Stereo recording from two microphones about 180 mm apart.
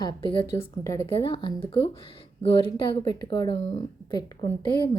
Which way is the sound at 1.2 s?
30° left (ahead or behind).